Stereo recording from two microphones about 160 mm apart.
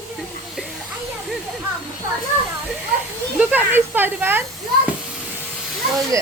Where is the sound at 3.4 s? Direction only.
10° right (ahead or behind).